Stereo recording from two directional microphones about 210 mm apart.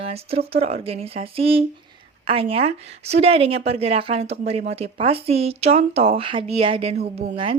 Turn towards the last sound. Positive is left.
turn(degrees=-25)  # may be behind; listen again after turning